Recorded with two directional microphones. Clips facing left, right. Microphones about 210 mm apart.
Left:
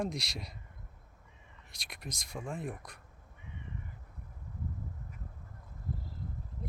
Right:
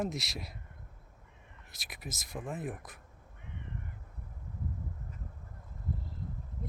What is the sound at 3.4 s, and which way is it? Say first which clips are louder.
Crow: right 1 dB; 60° right (ahead or behind).